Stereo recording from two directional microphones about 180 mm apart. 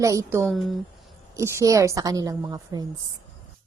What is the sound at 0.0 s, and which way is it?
Speech, 15° right (ahead or behind).